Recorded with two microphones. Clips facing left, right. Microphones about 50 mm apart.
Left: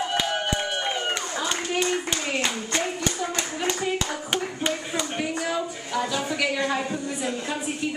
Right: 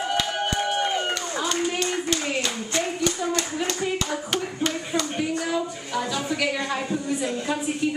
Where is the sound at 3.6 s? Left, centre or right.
Centre.